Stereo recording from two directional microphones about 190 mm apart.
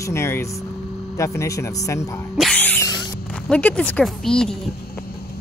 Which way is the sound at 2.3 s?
5° left (ahead or behind).